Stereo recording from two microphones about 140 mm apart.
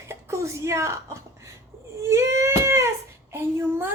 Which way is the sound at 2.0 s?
20° right (ahead or behind).